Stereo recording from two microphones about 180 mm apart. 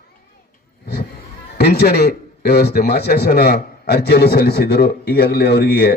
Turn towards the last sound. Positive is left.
turn(degrees=65)  # may be behind; listen again after turning